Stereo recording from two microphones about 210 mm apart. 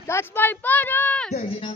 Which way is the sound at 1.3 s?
30° left (ahead or behind).